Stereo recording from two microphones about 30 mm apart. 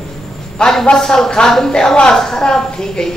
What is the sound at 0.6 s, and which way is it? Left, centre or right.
Speech, left.